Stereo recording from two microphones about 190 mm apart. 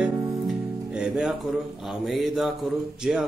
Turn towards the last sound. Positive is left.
turn(degrees=-5)  # may be behind; listen again after turning